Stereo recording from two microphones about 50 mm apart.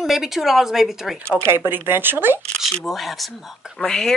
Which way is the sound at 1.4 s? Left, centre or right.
Right.